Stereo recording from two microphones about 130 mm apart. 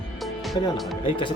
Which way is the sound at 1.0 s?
40° left (ahead or behind).